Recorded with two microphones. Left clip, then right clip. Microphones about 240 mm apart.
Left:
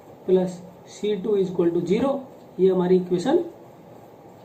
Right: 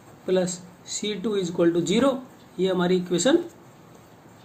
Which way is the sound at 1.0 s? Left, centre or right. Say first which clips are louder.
Left 5 dB; right.